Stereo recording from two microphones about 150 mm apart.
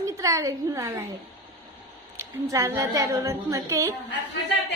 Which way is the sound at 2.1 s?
20° right (ahead or behind).